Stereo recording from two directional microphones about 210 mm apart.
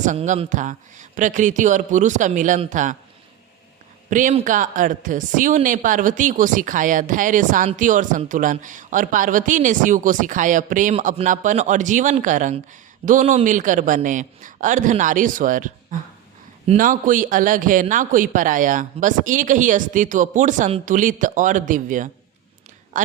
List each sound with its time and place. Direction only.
0.0 s speech: 35° right (ahead or behind)
4.1 s speech: 40° right (ahead or behind)